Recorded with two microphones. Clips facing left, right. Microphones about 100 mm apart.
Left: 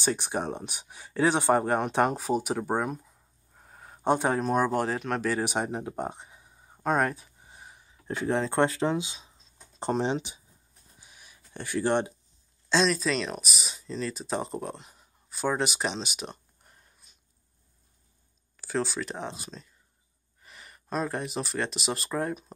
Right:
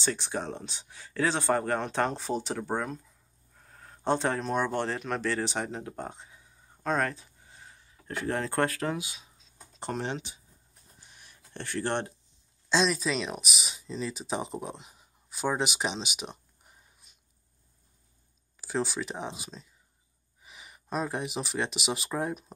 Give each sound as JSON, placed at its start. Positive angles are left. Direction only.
{"t": 0.0, "sound": "speech", "side_deg": 20}
{"t": 11.0, "sound": "a sound", "side_deg": 5}
{"t": 12.6, "sound": "speech", "side_deg": -5}
{"t": 18.6, "sound": "speech", "side_deg": -5}